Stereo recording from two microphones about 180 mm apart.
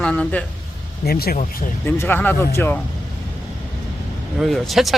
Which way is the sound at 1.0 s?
55° left (ahead or behind).